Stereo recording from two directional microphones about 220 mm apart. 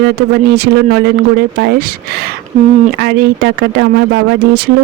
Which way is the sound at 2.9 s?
45° right (ahead or behind).